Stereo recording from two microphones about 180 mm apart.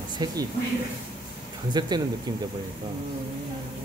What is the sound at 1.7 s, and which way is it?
Speech, 25° right (ahead or behind).